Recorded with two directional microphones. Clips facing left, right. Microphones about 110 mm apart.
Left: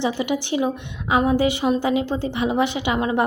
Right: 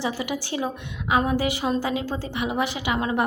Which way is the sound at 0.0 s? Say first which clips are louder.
Left 5 dB; 25° left (ahead or behind).